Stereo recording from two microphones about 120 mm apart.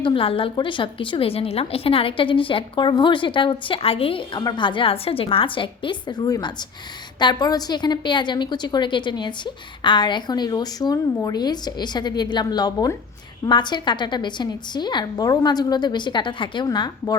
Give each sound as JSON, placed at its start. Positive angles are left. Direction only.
{"t": 0.0, "sound": "a woman's voice", "side_deg": 45}
{"t": 4.4, "sound": "a woman's voice", "side_deg": 40}